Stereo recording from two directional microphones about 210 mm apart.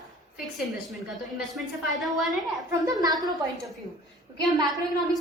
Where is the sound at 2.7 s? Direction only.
15° right (ahead or behind).